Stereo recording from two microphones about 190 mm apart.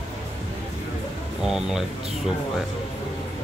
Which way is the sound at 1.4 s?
5° right (ahead or behind).